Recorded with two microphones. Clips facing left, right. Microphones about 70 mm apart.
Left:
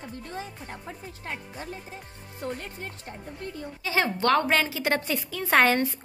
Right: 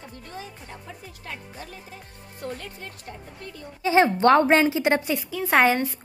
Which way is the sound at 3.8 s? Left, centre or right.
Right.